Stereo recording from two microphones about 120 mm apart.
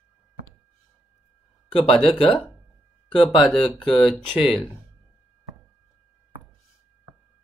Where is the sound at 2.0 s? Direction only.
45° left (ahead or behind).